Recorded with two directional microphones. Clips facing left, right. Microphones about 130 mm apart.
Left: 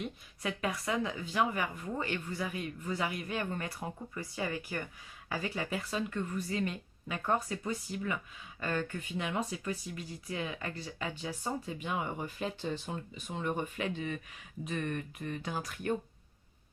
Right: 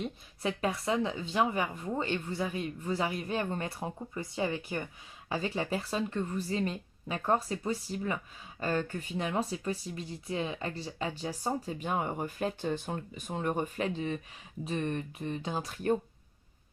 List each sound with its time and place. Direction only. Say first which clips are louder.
0.0 s speech: right 3 dB; 30° right (ahead or behind)